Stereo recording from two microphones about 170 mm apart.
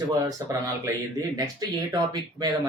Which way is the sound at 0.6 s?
20° right (ahead or behind).